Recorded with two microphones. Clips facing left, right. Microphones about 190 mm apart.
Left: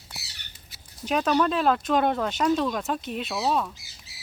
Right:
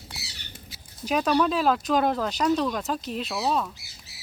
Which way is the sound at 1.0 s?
Centre (ahead or behind).